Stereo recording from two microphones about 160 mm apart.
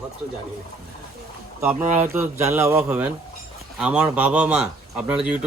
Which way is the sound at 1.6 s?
15° right (ahead or behind).